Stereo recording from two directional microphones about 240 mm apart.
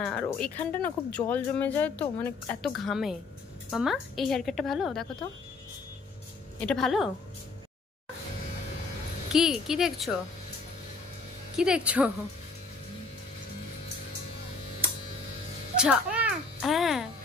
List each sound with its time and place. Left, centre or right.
0.0 s a woman's voice: centre
6.6 s a woman's voice: centre
9.3 s a woman's voice: centre
11.5 s a woman's voice: centre
15.8 s a sound: centre